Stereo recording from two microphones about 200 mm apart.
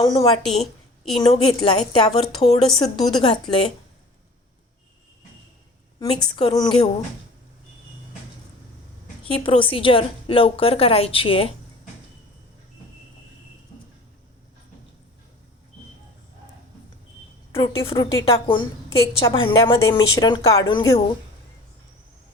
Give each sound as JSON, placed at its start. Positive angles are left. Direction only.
{"t": 0.4, "sound": "a sound", "side_deg": 0}
{"t": 1.1, "sound": "a woman's voice", "side_deg": 25}
{"t": 2.7, "sound": "a woman's voice", "side_deg": 20}
{"t": 6.0, "sound": "a woman's voice", "side_deg": 25}
{"t": 9.2, "sound": "a woman's voice", "side_deg": 25}
{"t": 17.6, "sound": "a woman's voice", "side_deg": 20}